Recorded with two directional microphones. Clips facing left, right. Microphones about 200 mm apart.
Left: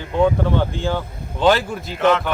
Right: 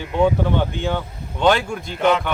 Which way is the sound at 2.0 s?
10° right (ahead or behind).